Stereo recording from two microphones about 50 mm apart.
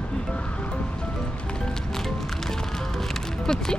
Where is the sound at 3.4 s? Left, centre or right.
Centre.